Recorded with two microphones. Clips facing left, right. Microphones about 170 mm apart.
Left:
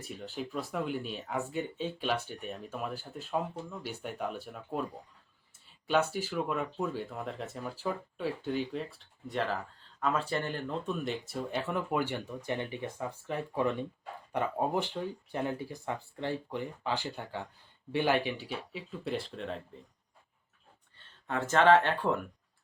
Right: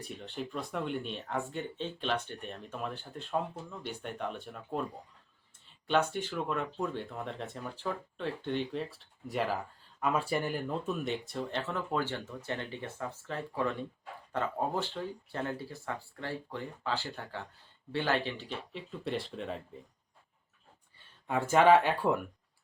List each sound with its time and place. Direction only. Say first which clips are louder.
0.0 s speech: left 1 dB; 5° left (ahead or behind)
5.9 s speech: left 1 dB; 5° left (ahead or behind)
21.0 s speech: right 2 dB; 10° right (ahead or behind)